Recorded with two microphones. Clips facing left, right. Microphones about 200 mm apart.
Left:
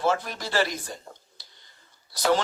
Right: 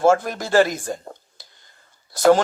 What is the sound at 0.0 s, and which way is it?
Speech, 50° right (ahead or behind).